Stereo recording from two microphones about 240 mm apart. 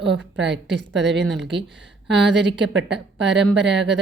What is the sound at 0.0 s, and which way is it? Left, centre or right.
Speech, right.